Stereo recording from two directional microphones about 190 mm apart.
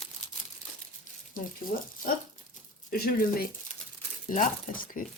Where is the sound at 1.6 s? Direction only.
50° left (ahead or behind).